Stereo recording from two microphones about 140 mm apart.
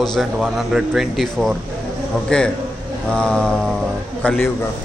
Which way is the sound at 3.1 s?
5° left (ahead or behind).